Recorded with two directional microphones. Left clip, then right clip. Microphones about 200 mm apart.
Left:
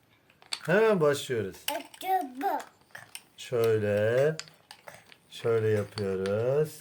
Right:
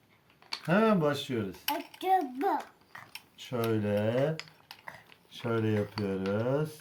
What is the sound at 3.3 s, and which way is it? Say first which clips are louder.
Cutlery: left 6 dB; 50° left (ahead or behind).